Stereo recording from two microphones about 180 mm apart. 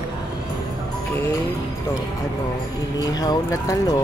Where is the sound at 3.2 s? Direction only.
20° left (ahead or behind).